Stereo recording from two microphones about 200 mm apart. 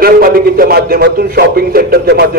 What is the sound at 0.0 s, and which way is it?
A man's voice, 50° right (ahead or behind).